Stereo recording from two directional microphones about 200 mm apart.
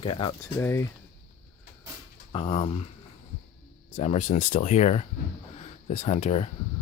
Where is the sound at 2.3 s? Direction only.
30° left (ahead or behind).